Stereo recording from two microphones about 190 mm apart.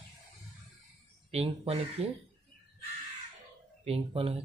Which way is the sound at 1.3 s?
35° right (ahead or behind).